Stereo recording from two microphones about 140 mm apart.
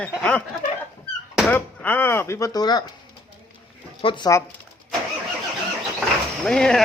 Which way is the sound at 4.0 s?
35° left (ahead or behind).